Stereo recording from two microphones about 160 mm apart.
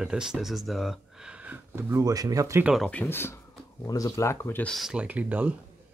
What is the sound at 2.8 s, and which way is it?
Speech, 10° left (ahead or behind).